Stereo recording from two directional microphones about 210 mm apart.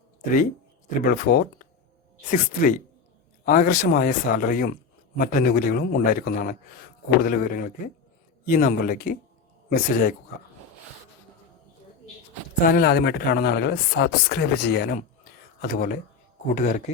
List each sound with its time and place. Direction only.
1.0 s speech: 45° left (ahead or behind)
12.6 s speech: 45° left (ahead or behind)
14.9 s a sound: 45° left (ahead or behind)
16.6 s speech: 40° left (ahead or behind)